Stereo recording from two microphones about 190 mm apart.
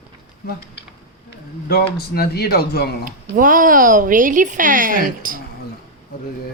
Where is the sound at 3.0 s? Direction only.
45° right (ahead or behind).